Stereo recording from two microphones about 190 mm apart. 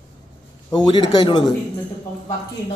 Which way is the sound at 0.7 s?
25° left (ahead or behind).